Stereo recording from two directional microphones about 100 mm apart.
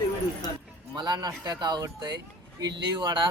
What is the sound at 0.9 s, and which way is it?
Speech, 45° right (ahead or behind).